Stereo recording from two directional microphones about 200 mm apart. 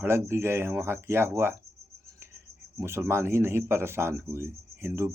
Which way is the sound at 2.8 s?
15° right (ahead or behind).